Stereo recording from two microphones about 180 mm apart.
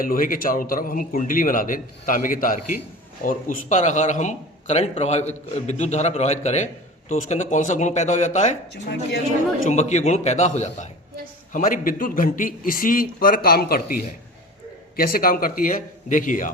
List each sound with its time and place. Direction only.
0.0 s a man's voice: 50° left (ahead or behind)
8.7 s a woman's voice: 70° left (ahead or behind)
9.6 s a man's voice: 40° left (ahead or behind); by 13.8 s 55° left (ahead or behind)
14.9 s a man's voice: 55° left (ahead or behind)